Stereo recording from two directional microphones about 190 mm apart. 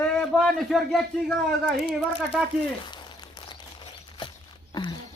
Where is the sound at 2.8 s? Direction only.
25° left (ahead or behind).